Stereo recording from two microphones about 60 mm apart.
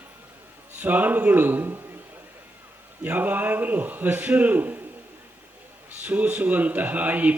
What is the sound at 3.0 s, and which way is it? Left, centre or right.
Speech, right.